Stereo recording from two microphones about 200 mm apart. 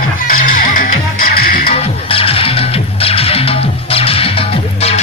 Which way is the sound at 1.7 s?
30° left (ahead or behind).